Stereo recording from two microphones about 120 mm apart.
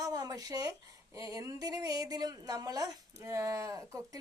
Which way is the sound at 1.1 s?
30° right (ahead or behind).